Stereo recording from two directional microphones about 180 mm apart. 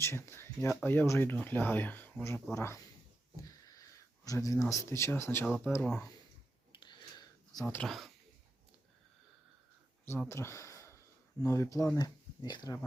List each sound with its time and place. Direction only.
0.0 s speech: 15° left (ahead or behind)
6.7 s a sound: 25° left (ahead or behind)
7.6 s speech: 10° left (ahead or behind)
10.1 s speech: 15° left (ahead or behind)